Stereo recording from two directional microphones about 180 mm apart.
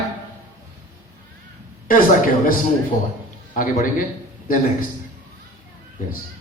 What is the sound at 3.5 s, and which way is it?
Speech, 50° left (ahead or behind).